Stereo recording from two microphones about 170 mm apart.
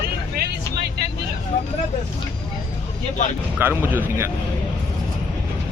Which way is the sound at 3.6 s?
10° right (ahead or behind).